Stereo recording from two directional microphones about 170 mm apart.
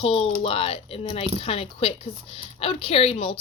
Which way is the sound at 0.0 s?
30° left (ahead or behind).